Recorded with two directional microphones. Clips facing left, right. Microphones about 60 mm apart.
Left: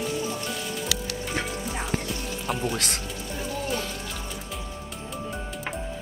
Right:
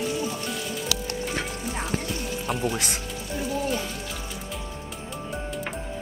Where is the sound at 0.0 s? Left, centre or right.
Centre.